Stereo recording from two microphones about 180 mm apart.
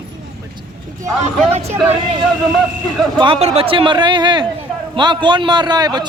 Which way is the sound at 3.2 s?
30° right (ahead or behind).